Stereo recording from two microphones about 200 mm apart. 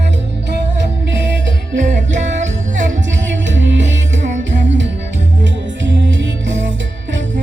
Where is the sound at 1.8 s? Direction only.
40° right (ahead or behind).